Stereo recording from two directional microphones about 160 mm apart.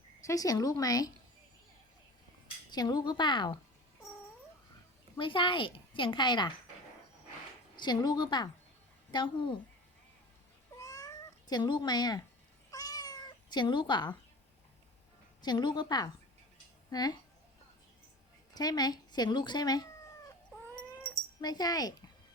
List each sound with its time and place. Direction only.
0.3 s a woman's voice: 20° left (ahead or behind)
2.7 s a woman's voice: 25° left (ahead or behind)
5.1 s a woman's voice: 30° left (ahead or behind)
7.8 s a woman's voice: 25° left (ahead or behind)
10.8 s cat: 20° left (ahead or behind)
15.4 s a woman's voice: 25° left (ahead or behind)
18.5 s speech: 25° left (ahead or behind)
21.0 s cat: 10° left (ahead or behind)
21.4 s a woman's voice: 25° left (ahead or behind)